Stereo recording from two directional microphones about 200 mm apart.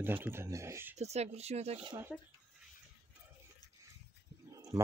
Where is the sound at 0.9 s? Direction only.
35° right (ahead or behind).